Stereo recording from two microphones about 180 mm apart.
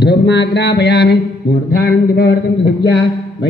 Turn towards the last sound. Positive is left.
turn(degrees=70)  # may be behind; listen again after turning